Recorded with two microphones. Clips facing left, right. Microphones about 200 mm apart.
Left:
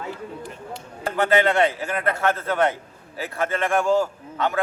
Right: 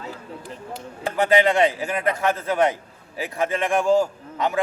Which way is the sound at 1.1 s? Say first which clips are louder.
Right 1 dB; 15° right (ahead or behind).